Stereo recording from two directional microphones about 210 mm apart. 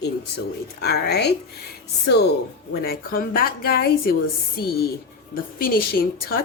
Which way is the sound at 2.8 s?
45° left (ahead or behind).